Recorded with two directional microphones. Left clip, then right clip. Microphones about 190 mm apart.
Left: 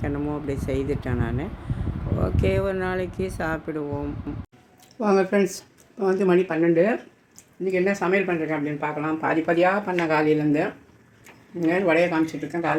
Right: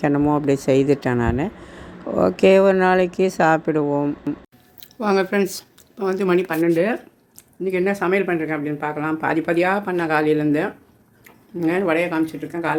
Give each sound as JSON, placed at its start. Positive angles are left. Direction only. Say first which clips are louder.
{"t": 0.0, "sound": "speech", "louder": "right 10 dB", "side_deg": -40}
{"t": 4.8, "sound": "speech", "louder": "right 1 dB", "side_deg": 0}
{"t": 6.6, "sound": "speech", "louder": "right 1 dB", "side_deg": -10}